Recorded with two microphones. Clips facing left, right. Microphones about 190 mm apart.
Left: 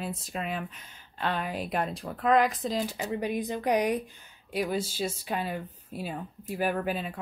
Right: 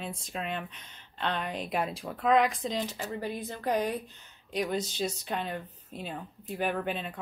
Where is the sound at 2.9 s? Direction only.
15° left (ahead or behind).